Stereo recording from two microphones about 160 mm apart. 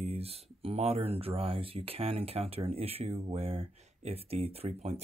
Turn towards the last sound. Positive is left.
turn(degrees=-40)  # may be behind; listen again after turning